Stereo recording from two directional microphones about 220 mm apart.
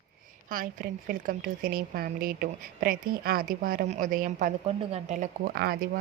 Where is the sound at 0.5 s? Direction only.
40° right (ahead or behind).